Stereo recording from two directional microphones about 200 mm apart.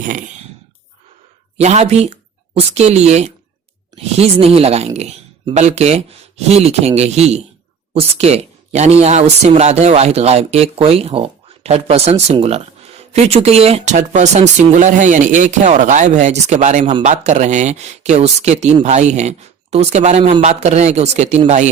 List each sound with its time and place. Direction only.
0.0 s speech: 40° right (ahead or behind)
1.5 s speech: 35° right (ahead or behind)